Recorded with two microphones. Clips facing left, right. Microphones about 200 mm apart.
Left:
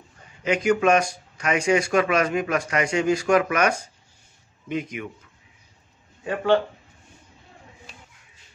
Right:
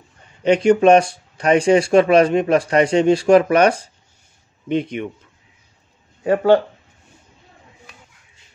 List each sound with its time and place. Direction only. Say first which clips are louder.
0.4 s speech: right 7 dB; 30° right (ahead or behind)
6.2 s speech: right 7 dB; 40° right (ahead or behind)